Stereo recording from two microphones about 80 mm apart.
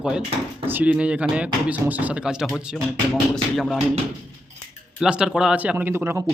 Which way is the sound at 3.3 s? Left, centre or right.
Centre.